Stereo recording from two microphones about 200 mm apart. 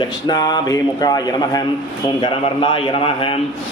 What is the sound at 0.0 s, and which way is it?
A man's voice, 20° left (ahead or behind).